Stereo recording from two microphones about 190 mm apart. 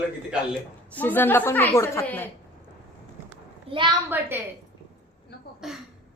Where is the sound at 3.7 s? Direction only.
25° right (ahead or behind).